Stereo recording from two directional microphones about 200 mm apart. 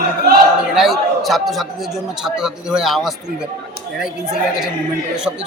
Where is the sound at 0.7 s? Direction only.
Centre (ahead or behind).